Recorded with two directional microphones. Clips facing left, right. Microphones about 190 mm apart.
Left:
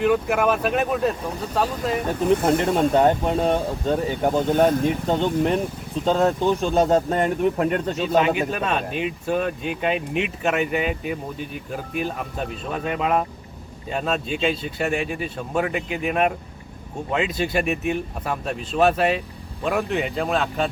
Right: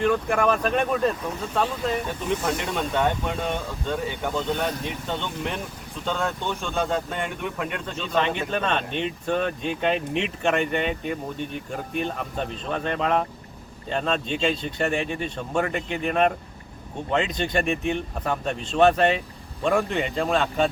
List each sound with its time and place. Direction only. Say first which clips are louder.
0.0 s speech: left 2 dB; 5° left (ahead or behind)
2.0 s speech: left 7 dB; 55° left (ahead or behind)
2.8 s speech: left 5 dB; 40° left (ahead or behind)
8.0 s speech: left 4 dB; 5° left (ahead or behind)